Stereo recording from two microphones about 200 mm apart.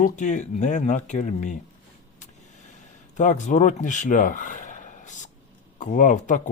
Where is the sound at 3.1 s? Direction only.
35° left (ahead or behind).